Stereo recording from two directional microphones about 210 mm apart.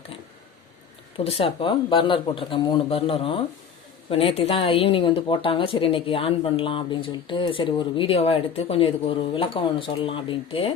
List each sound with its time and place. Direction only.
1.1 s speech: 25° left (ahead or behind)